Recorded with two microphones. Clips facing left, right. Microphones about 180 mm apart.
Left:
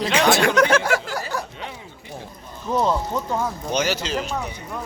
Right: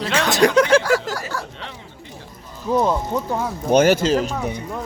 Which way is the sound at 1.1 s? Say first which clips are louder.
Even; 20° left (ahead or behind).